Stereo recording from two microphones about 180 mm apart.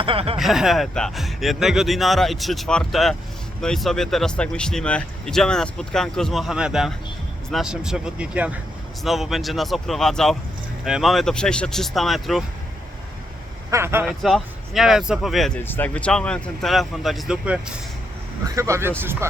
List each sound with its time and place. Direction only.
0.0 s speech: 30° right (ahead or behind)
0.3 s speech: centre (ahead or behind)
13.7 s speech: 15° right (ahead or behind)